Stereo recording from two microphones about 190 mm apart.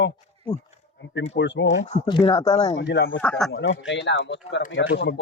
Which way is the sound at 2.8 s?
65° left (ahead or behind).